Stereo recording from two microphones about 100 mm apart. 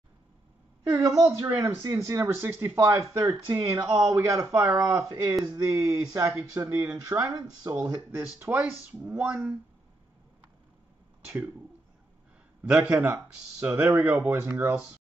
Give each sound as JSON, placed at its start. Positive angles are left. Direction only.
{"t": 0.9, "sound": "speech", "side_deg": -35}
{"t": 8.2, "sound": "speech", "side_deg": -20}
{"t": 12.6, "sound": "speech", "side_deg": -15}